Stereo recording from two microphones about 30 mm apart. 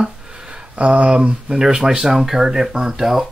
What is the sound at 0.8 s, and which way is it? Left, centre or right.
Speech, right.